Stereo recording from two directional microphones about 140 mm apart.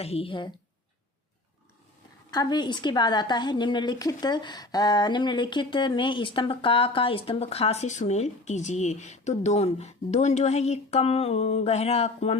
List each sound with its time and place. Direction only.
0.0 s a woman's voice: 45° left (ahead or behind)
2.3 s a woman's voice: 30° left (ahead or behind); by 12.4 s 50° left (ahead or behind)